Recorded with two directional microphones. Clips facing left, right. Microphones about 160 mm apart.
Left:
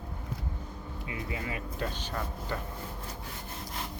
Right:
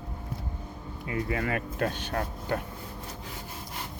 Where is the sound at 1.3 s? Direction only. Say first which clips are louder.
Right 7 dB; 60° right (ahead or behind).